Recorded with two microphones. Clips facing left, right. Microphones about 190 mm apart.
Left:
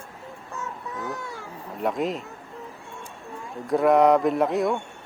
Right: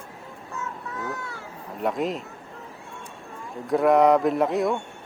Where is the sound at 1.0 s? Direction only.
15° left (ahead or behind).